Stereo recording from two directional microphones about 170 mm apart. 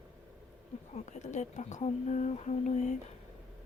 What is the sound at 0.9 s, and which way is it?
Speech, 45° left (ahead or behind).